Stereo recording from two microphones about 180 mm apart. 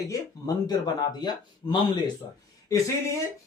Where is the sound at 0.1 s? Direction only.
20° left (ahead or behind).